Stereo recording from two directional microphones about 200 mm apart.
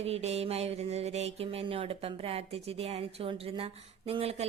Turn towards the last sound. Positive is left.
turn(degrees=-30)  # may be behind; listen again after turning